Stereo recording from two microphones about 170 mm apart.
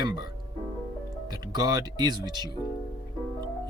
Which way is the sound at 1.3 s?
25° right (ahead or behind).